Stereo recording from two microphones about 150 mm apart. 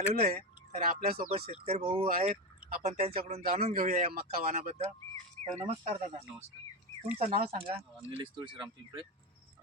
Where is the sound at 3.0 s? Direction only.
45° right (ahead or behind).